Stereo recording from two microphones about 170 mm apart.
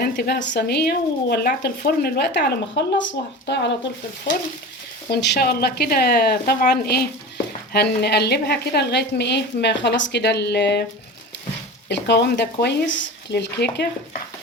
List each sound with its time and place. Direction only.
0.0 s speech: 70° left (ahead or behind); by 3.7 s 90° left
5.0 s a woman's voice: 70° left (ahead or behind)
11.9 s a woman's voice: 90° left